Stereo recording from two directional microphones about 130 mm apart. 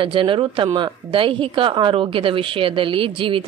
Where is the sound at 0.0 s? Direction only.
40° right (ahead or behind).